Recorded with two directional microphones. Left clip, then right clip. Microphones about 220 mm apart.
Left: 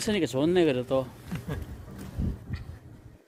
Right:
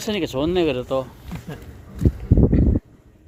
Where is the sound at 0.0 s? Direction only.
Centre (ahead or behind).